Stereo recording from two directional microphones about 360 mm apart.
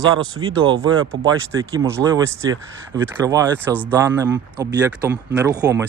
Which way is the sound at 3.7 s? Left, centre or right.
Centre.